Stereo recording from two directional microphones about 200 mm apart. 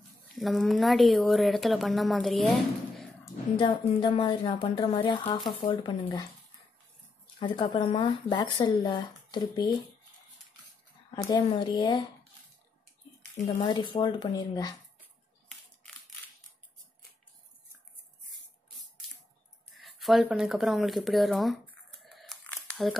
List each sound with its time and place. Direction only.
0.3 s speech: centre (ahead or behind)
3.5 s speech: 25° left (ahead or behind)
7.3 s speech: 25° left (ahead or behind)
11.1 s speech: 20° left (ahead or behind)
13.6 s speech: 20° left (ahead or behind)
19.7 s speech: centre (ahead or behind)
22.0 s a sound: centre (ahead or behind)